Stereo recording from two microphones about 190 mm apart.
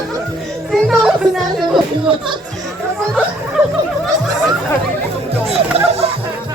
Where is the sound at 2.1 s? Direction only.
25° right (ahead or behind).